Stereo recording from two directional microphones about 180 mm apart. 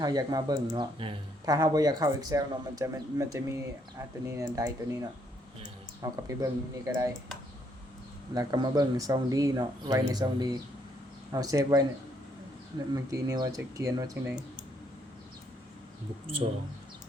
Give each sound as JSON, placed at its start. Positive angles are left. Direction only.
{"t": 0.0, "sound": "speech", "side_deg": -20}
{"t": 8.3, "sound": "speech", "side_deg": -20}
{"t": 12.9, "sound": "speech", "side_deg": -20}
{"t": 16.4, "sound": "speech", "side_deg": -35}